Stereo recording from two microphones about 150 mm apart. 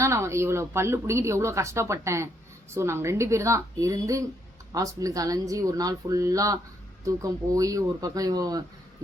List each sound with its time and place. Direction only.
0.0 s speech: 20° right (ahead or behind)